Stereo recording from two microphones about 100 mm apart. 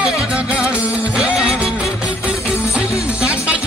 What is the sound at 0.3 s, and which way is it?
Music, 10° right (ahead or behind).